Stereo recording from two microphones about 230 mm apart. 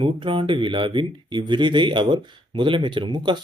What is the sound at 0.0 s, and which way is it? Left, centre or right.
Speech, right.